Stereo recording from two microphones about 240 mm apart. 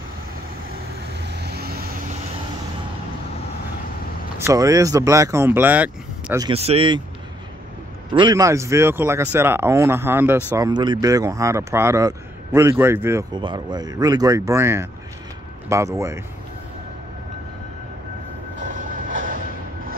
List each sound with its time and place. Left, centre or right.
1.2 s vehicle: right
4.4 s speech: centre
6.4 s speech: right
8.1 s speech: centre
18.6 s vehicle: right